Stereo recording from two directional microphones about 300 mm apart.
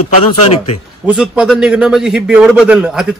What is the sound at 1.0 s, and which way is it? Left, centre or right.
Speech, centre.